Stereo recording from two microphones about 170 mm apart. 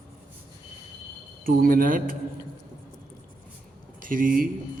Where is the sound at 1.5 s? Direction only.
55° right (ahead or behind).